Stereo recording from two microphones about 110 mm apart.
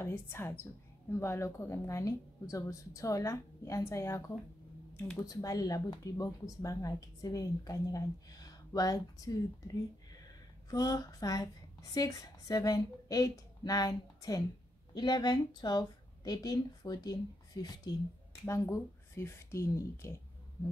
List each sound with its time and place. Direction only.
0.0 s a woman's voice: 20° left (ahead or behind)
10.7 s a woman's voice: 35° left (ahead or behind)
18.4 s a woman's voice: 25° left (ahead or behind)